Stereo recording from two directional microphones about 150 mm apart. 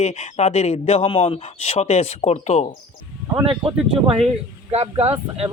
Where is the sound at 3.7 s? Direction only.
40° right (ahead or behind).